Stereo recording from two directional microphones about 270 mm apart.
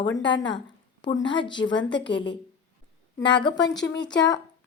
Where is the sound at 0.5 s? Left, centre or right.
Centre.